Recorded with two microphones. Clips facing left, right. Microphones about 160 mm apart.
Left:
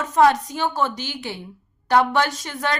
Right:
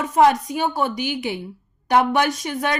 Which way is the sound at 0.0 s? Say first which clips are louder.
Right 1 dB; 15° right (ahead or behind).